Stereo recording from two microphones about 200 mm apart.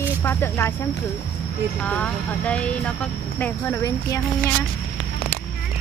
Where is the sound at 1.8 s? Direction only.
5° left (ahead or behind).